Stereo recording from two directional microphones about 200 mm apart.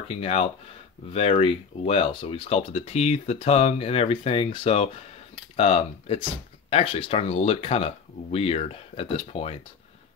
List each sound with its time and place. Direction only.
0.1 s speech: 30° left (ahead or behind)